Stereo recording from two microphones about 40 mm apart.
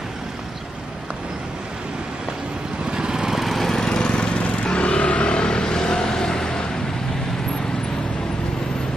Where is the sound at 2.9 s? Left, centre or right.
Centre.